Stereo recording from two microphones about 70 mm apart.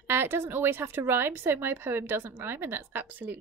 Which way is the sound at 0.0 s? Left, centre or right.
Right.